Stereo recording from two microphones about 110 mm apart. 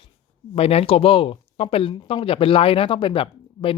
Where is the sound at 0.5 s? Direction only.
65° left (ahead or behind).